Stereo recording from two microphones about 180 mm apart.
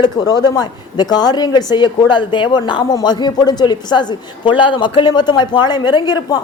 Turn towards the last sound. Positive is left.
turn(degrees=20)  # may be behind; listen again after turning